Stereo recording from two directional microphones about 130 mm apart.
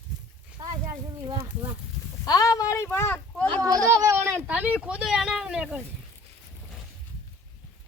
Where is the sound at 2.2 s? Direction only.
30° left (ahead or behind).